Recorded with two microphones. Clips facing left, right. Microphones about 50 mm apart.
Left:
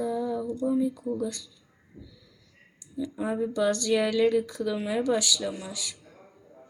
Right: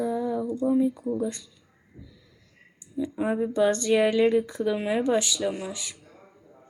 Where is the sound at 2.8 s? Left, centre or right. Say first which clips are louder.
Right 3 dB; right.